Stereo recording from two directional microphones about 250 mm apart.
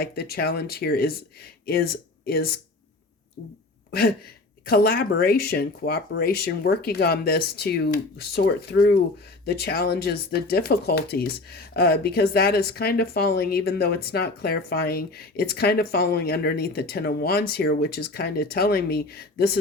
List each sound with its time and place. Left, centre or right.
0.0 s speech: left
4.6 s speech: left